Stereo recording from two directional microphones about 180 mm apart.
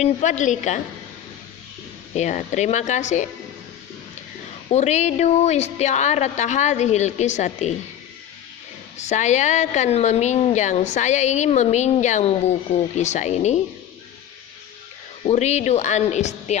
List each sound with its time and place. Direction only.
0.0 s a woman's voice: 40° left (ahead or behind)
2.1 s a woman's voice: 40° left (ahead or behind)
4.7 s a woman's voice: 40° left (ahead or behind)
9.0 s a woman's voice: 40° left (ahead or behind)
15.3 s a woman's voice: 40° left (ahead or behind)